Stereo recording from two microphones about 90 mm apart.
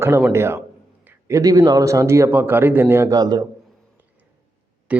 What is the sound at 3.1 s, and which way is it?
Speech, 50° right (ahead or behind).